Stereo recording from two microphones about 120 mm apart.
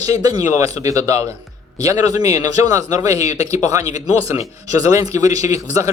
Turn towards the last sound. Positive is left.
turn(degrees=-25)  # may be behind; listen again after turning